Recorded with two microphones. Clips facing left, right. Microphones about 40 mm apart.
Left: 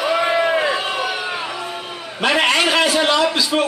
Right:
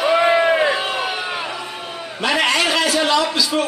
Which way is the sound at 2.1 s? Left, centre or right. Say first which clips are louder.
Left 2 dB; left.